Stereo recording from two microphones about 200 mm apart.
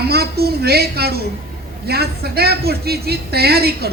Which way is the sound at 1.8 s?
50° right (ahead or behind).